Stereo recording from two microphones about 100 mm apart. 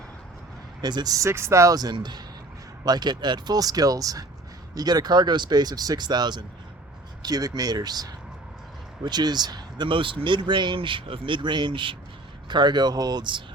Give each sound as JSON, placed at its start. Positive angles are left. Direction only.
{"t": 0.8, "sound": "speech", "side_deg": -45}